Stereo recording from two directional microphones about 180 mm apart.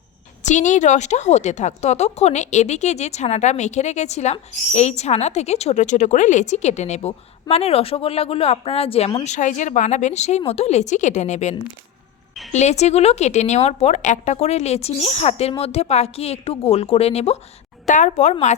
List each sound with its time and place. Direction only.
0.4 s a woman's voice: 40° left (ahead or behind)